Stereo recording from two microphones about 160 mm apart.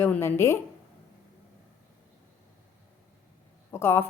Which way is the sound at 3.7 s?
15° left (ahead or behind).